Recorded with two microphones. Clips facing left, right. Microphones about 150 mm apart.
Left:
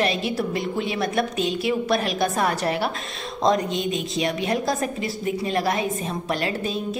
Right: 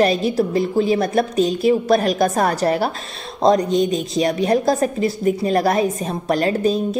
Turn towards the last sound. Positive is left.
turn(degrees=-40)  # may be behind; listen again after turning